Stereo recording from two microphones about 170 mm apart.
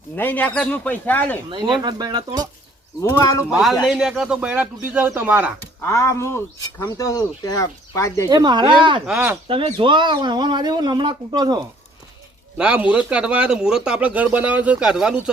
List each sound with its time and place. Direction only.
0.2 s speech: 10° left (ahead or behind)
1.8 s speech: 25° right (ahead or behind)
3.0 s speech: 20° left (ahead or behind)
3.6 s a man's voice: centre (ahead or behind)
5.8 s speech: 15° left (ahead or behind)
8.3 s speech: 25° right (ahead or behind)
9.0 s a man's voice: 5° right (ahead or behind)
9.5 s speech: 30° right (ahead or behind)
12.5 s speech: 5° right (ahead or behind)